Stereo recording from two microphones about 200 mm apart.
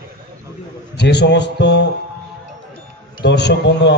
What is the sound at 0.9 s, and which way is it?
Speech, 60° left (ahead or behind).